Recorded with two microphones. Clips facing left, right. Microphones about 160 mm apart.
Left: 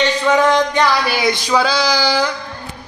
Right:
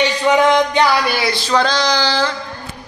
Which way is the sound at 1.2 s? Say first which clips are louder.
Left 1 dB; 15° left (ahead or behind).